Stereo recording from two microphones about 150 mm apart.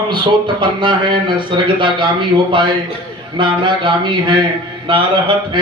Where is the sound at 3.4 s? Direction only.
30° right (ahead or behind).